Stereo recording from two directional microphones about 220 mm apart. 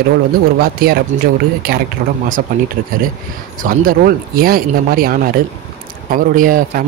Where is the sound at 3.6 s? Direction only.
40° right (ahead or behind).